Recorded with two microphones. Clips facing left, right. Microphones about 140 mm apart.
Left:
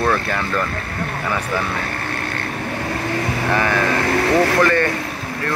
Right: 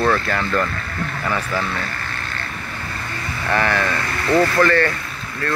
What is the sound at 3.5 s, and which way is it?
Speech, 10° left (ahead or behind).